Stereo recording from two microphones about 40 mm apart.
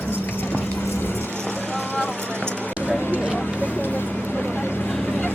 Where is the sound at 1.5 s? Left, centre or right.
Left.